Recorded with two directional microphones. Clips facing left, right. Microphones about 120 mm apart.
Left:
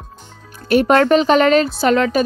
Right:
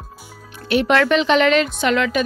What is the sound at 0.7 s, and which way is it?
Speech, 40° left (ahead or behind).